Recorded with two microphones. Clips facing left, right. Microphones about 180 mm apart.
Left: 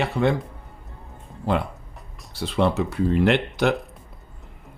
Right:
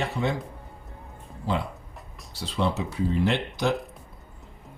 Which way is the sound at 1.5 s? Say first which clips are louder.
Left 5 dB; 60° left (ahead or behind).